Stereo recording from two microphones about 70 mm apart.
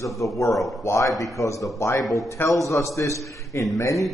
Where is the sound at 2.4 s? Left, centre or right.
Left.